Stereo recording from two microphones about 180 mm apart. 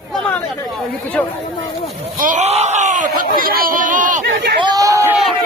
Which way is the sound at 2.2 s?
45° right (ahead or behind).